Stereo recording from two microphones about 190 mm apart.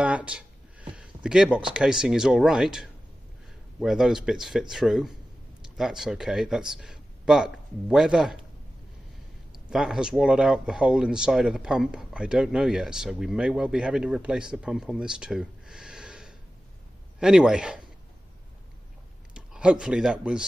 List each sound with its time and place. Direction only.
0.0 s speech: 5° right (ahead or behind)
9.7 s speech: 5° right (ahead or behind)
19.3 s speech: 5° right (ahead or behind)